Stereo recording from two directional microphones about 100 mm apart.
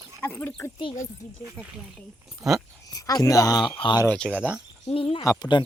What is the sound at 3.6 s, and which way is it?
Speech, 55° left (ahead or behind).